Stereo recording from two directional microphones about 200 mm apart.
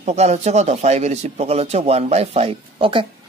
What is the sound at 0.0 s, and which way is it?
Speech, 35° right (ahead or behind).